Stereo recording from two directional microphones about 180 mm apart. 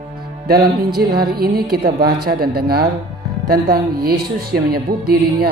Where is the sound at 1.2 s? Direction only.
60° right (ahead or behind).